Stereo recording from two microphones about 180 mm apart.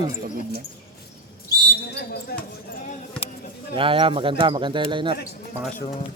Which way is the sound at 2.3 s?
60° left (ahead or behind).